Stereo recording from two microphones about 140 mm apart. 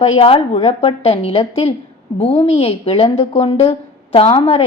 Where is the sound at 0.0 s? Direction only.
45° left (ahead or behind).